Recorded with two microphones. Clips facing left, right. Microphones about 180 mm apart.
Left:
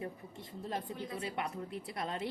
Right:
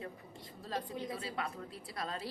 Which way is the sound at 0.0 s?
25° left (ahead or behind).